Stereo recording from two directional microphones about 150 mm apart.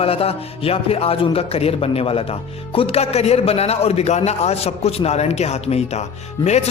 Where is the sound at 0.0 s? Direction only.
40° left (ahead or behind).